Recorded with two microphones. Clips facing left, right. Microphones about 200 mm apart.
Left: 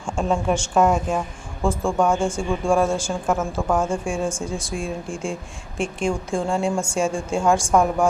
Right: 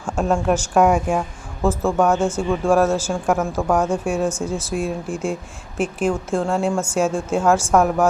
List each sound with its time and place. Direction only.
0.0 s a woman's voice: 5° right (ahead or behind)
2.1 s speech: 10° left (ahead or behind)
2.4 s a woman's voice: 5° right (ahead or behind)